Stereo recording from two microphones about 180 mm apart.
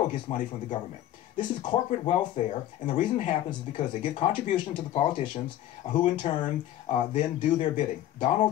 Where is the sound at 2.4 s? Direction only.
40° left (ahead or behind).